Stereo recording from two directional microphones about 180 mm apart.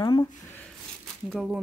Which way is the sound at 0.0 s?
20° left (ahead or behind).